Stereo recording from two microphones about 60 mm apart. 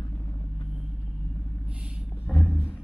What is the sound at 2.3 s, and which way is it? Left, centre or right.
Speech, centre.